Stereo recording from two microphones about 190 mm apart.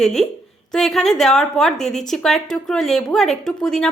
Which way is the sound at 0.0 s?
Centre (ahead or behind).